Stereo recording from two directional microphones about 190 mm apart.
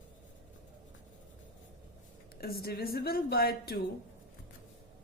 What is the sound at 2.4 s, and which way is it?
A woman's voice, 55° left (ahead or behind).